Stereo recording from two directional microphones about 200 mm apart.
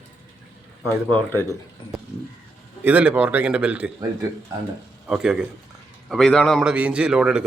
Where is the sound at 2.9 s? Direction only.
10° right (ahead or behind).